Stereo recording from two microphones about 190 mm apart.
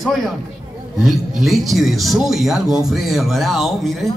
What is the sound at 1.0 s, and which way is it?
Speech, centre (ahead or behind).